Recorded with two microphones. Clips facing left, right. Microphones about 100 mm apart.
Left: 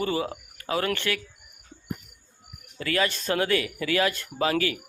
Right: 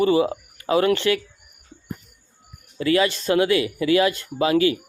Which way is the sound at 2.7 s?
20° right (ahead or behind).